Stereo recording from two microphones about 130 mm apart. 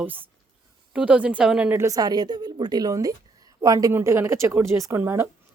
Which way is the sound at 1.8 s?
25° right (ahead or behind).